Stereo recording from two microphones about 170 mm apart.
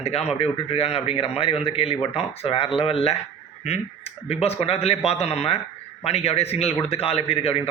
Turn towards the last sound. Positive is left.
turn(degrees=35)  # may be behind; listen again after turning